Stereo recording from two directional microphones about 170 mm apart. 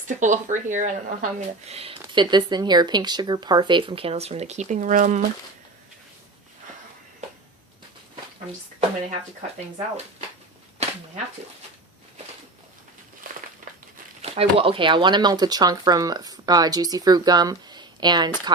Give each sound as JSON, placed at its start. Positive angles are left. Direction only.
{"t": 0.1, "sound": "speech", "side_deg": -45}
{"t": 2.1, "sound": "speech", "side_deg": -25}
{"t": 10.8, "sound": "a sound", "side_deg": -40}
{"t": 13.2, "sound": "crushing", "side_deg": -55}
{"t": 14.2, "sound": "speech", "side_deg": -35}